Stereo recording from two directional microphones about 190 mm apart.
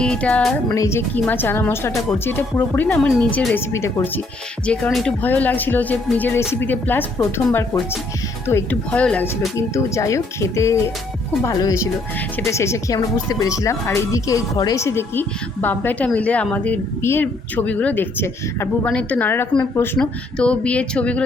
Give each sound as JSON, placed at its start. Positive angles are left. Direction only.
{"t": 0.0, "sound": "music", "side_deg": 5}
{"t": 0.7, "sound": "speech", "side_deg": 15}
{"t": 4.6, "sound": "speech", "side_deg": 5}